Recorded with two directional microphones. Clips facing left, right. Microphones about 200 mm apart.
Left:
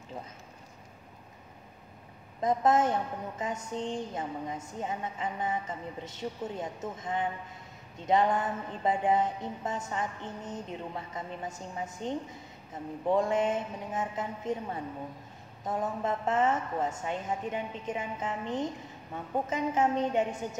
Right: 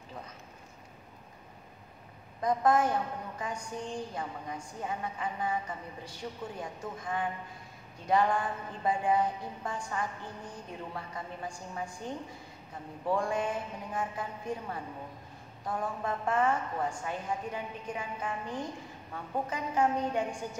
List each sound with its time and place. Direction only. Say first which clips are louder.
2.4 s a woman's voice: left 1 dB; 25° left (ahead or behind)